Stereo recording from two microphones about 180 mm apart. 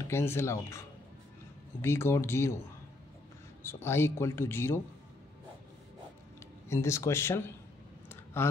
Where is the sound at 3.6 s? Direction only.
15° left (ahead or behind).